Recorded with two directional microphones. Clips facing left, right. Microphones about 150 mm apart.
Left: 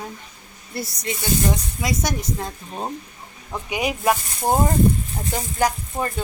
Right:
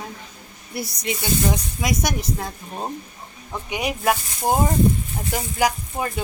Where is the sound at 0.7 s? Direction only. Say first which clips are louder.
Right 1 dB; 10° right (ahead or behind).